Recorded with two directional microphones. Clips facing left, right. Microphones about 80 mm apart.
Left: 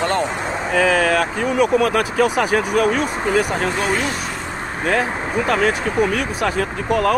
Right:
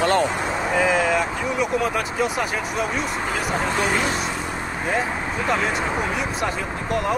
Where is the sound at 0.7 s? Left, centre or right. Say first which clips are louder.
Left 4 dB; left.